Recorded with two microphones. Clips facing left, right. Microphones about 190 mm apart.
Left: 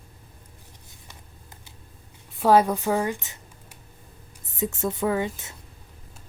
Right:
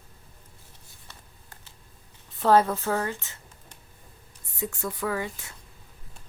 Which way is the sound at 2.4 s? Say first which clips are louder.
Left 2 dB; 10° left (ahead or behind).